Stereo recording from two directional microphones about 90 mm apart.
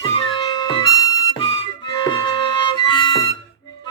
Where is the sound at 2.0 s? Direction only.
60° left (ahead or behind).